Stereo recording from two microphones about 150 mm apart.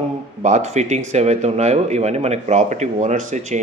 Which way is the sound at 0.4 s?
50° right (ahead or behind).